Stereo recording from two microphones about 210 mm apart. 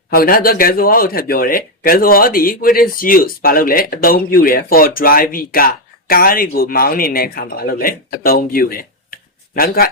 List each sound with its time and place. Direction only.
0.1 s speech: 45° left (ahead or behind)